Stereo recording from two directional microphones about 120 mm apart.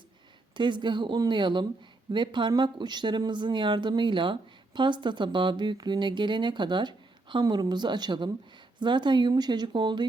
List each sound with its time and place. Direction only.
0.5 s speech: 40° right (ahead or behind)